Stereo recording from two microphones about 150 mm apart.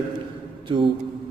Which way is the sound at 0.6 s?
35° right (ahead or behind).